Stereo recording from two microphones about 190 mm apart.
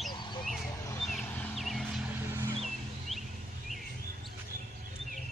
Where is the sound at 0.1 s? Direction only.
25° left (ahead or behind).